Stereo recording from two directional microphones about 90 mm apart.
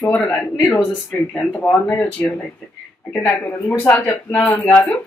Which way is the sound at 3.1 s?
5° left (ahead or behind).